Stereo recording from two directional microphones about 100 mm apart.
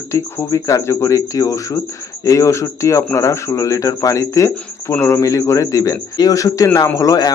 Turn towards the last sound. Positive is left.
turn(degrees=35)  # may be behind; listen again after turning